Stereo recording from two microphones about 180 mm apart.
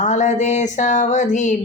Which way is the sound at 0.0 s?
40° left (ahead or behind).